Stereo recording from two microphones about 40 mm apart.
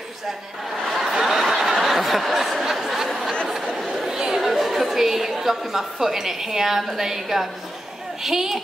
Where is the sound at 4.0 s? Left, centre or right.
Centre.